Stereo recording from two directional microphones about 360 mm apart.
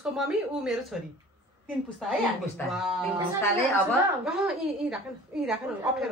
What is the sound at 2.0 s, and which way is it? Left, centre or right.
A woman's voice, centre.